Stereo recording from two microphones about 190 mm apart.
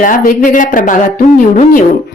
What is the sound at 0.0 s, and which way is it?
Speech, 45° left (ahead or behind).